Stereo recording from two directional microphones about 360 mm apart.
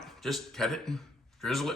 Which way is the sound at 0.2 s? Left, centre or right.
Centre.